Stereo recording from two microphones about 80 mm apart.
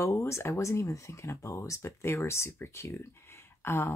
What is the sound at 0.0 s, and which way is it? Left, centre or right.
Speech, left.